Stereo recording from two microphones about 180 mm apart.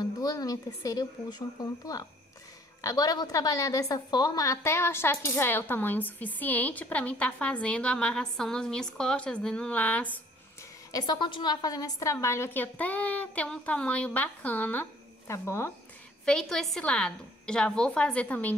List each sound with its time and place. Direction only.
0.2 s a woman's voice: 20° left (ahead or behind)
10.9 s a woman's voice: 20° left (ahead or behind)
16.3 s a woman's voice: 5° left (ahead or behind)